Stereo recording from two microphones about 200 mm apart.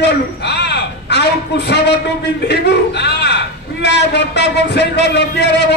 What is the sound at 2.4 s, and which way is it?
A man's voice, 55° left (ahead or behind).